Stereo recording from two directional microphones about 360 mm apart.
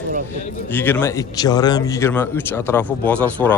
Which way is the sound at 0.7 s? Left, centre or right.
Centre.